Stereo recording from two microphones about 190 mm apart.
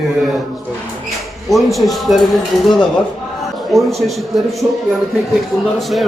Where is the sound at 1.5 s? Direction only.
Centre (ahead or behind).